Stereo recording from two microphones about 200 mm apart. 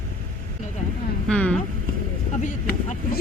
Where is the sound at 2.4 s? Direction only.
40° left (ahead or behind).